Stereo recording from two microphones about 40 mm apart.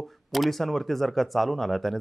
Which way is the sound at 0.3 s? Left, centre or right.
Centre.